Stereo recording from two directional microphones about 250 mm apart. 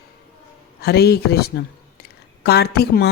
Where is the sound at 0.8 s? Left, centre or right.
Left.